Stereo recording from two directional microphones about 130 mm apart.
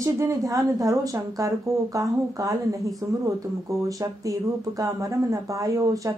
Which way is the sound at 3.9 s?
25° right (ahead or behind).